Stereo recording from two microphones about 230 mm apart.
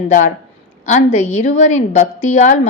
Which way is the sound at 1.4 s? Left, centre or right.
Left.